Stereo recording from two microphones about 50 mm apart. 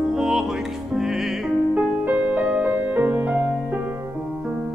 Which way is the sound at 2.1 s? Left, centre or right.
Right.